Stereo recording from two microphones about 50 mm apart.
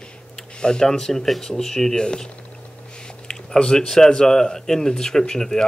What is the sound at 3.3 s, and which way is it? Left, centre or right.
Speech, centre.